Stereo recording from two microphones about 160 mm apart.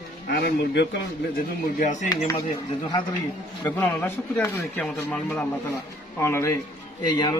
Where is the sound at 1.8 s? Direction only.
50° left (ahead or behind).